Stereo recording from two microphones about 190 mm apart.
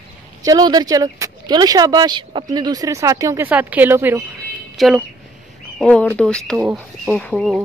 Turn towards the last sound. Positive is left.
turn(degrees=5)  # may be behind; listen again after turning